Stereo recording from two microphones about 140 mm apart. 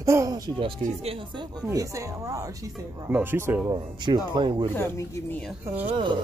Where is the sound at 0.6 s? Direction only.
40° right (ahead or behind).